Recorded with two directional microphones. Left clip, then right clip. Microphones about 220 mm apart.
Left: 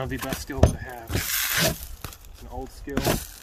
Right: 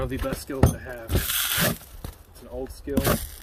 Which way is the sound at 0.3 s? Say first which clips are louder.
Right 2 dB; 20° left (ahead or behind).